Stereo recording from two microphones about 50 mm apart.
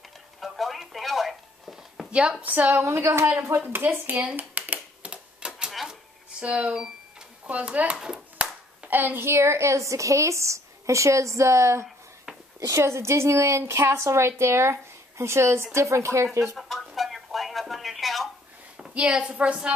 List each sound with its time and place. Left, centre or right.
0.4 s a sound: centre
2.0 s a sound: centre
2.4 s a woman's voice: right
2.8 s a woman's voice: right
3.5 s a woman's voice: right
5.0 s tick-tock: right
5.7 s cash register: centre
6.4 s a sound: right
7.5 s speech: right
8.4 s clapping: right
9.2 s a woman's voice: right
16.5 s a sound: centre
18.8 s a woman's voice: centre